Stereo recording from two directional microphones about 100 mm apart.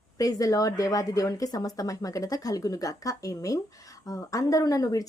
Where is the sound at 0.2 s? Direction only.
35° left (ahead or behind).